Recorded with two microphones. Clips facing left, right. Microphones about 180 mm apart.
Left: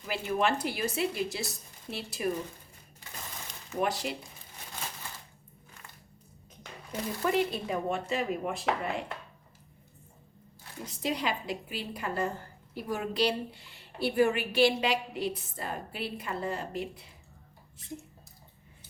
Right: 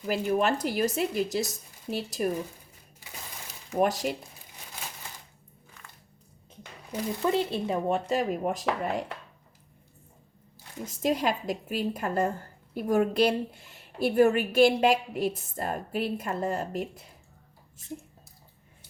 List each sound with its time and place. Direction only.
0.1 s a woman's voice: 40° right (ahead or behind)
3.8 s a woman's voice: 45° right (ahead or behind)
7.1 s speech: 20° right (ahead or behind); by 9.0 s 40° right (ahead or behind)
10.8 s a woman's voice: 45° right (ahead or behind)